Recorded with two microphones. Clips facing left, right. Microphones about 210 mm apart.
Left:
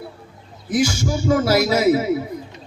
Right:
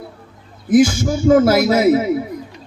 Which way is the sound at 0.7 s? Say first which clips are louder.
Right 7 dB; 50° right (ahead or behind).